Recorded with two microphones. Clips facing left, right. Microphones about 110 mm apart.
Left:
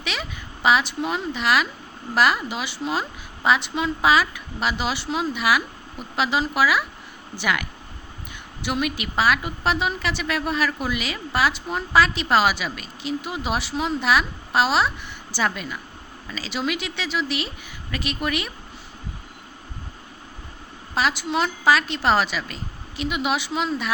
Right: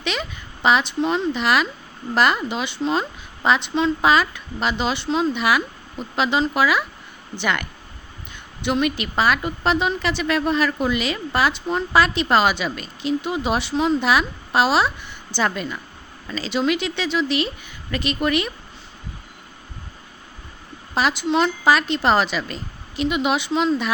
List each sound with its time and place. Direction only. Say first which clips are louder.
0.0 s speech: right 4 dB; 5° left (ahead or behind)
20.9 s speech: right 3 dB; centre (ahead or behind)